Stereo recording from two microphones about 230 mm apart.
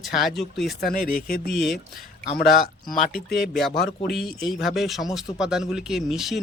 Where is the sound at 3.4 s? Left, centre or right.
Centre.